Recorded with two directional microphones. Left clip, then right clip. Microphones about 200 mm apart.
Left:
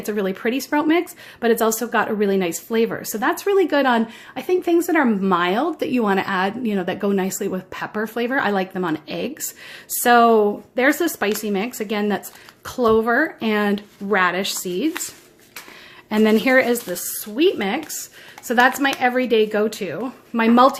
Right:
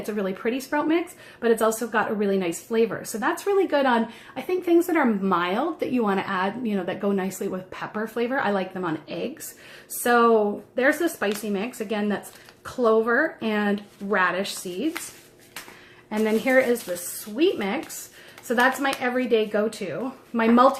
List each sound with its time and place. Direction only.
0.0 s speech: 40° left (ahead or behind)
16.0 s speech: 50° left (ahead or behind)